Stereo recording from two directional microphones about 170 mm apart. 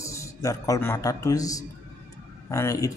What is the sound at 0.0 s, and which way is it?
A man's voice, 15° left (ahead or behind).